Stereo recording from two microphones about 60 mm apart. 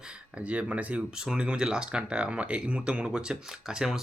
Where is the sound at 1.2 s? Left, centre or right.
Centre.